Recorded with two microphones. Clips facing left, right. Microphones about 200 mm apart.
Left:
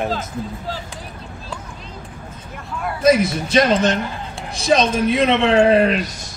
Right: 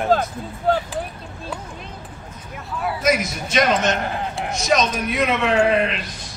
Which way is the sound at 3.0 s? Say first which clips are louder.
Left 8 dB; 30° left (ahead or behind).